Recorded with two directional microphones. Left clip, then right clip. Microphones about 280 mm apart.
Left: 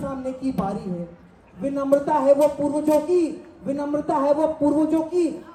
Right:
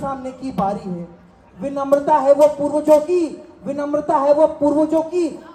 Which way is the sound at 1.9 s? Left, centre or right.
Centre.